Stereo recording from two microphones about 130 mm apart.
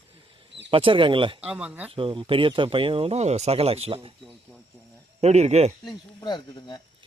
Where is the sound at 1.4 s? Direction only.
10° right (ahead or behind).